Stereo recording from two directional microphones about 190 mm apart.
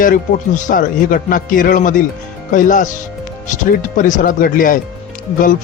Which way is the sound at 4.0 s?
45° left (ahead or behind).